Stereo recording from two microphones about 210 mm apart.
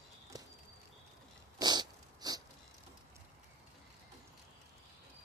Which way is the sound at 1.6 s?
20° right (ahead or behind).